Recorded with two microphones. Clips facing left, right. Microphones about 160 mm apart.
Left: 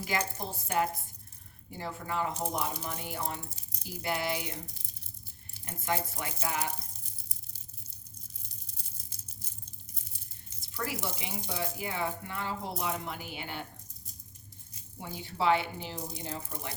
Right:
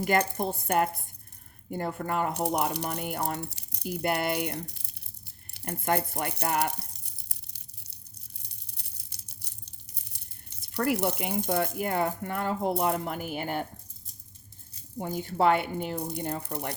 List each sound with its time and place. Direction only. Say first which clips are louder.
0.0 s speech: right 8 dB; 55° right (ahead or behind)
5.5 s a sound: right 5 dB; 60° right (ahead or behind)
12.8 s a woman's voice: right 7 dB; 50° right (ahead or behind)
14.9 s speech: right 8 dB; 50° right (ahead or behind); by 16.7 s 65° right (ahead or behind)